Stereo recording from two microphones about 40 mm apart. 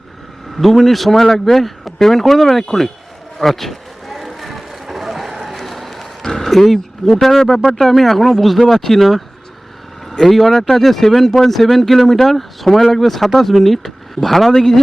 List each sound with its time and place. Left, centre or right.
0.5 s speech: centre
3.3 s vehicle: centre
5.5 s a sound: centre
7.7 s speech: centre